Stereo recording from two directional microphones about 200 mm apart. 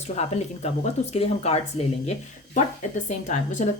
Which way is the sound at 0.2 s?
35° left (ahead or behind).